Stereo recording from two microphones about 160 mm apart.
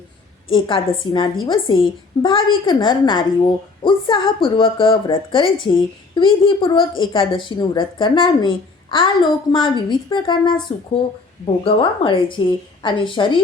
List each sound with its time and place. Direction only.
0.5 s a woman's voice: 30° left (ahead or behind)